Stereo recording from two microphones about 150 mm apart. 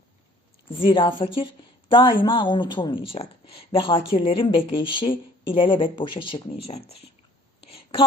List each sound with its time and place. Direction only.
0.8 s speech: 35° left (ahead or behind)
7.7 s whispering: 35° left (ahead or behind)